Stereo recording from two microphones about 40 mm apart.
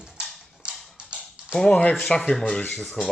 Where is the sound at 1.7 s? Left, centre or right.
Left.